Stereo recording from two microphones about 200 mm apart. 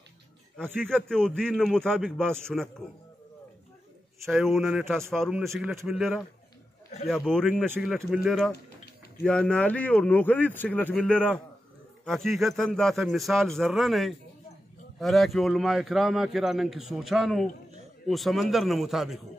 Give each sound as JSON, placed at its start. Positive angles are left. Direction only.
{"t": 0.7, "sound": "a man's voice", "side_deg": 5}
{"t": 4.3, "sound": "a man's voice", "side_deg": 0}
{"t": 5.4, "sound": "a man's voice", "side_deg": -15}
{"t": 5.7, "sound": "a man's voice", "side_deg": 0}